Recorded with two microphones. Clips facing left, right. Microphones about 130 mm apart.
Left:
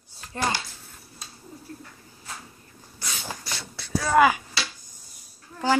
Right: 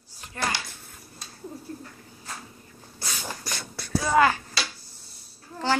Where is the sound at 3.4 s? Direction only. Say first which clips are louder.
Right 1 dB; 50° right (ahead or behind).